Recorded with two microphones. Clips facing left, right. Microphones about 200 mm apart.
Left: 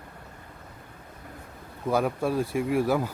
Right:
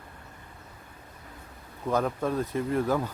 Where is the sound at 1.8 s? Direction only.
10° left (ahead or behind).